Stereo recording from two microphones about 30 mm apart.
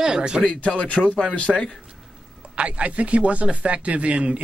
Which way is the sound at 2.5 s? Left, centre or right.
Right.